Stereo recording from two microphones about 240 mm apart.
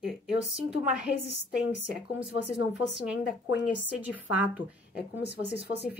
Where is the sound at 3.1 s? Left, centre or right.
Centre.